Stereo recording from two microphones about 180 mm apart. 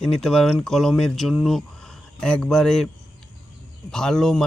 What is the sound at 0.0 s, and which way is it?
Speech, 5° left (ahead or behind).